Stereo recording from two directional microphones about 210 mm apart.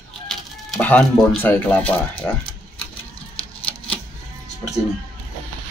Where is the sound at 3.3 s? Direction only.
25° left (ahead or behind).